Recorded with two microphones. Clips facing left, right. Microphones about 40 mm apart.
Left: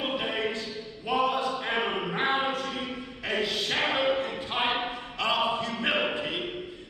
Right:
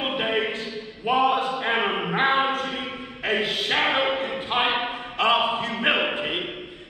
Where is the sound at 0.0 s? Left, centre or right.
Right.